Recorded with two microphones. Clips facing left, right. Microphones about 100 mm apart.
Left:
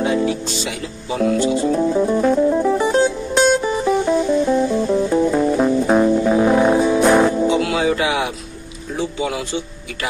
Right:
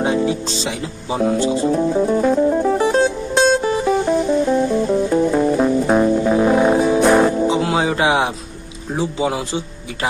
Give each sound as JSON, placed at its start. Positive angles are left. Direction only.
{"t": 0.0, "sound": "music", "side_deg": -25}
{"t": 1.7, "sound": "music", "side_deg": -5}
{"t": 3.6, "sound": "music", "side_deg": 0}
{"t": 7.4, "sound": "music", "side_deg": -30}